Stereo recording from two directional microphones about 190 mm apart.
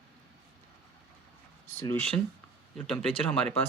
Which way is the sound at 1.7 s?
15° left (ahead or behind).